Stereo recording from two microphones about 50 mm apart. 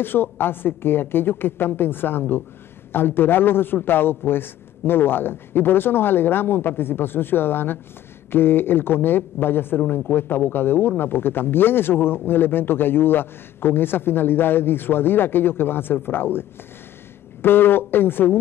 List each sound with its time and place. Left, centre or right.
0.0 s speech: left